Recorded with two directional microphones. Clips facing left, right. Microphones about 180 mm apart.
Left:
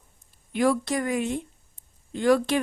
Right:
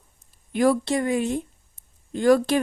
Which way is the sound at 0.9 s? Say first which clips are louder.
Right 3 dB; 25° right (ahead or behind).